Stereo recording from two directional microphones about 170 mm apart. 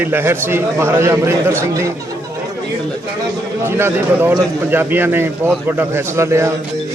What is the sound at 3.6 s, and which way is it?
A man's voice, 15° right (ahead or behind).